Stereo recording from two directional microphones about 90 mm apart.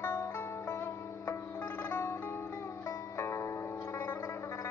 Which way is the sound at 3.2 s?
30° left (ahead or behind).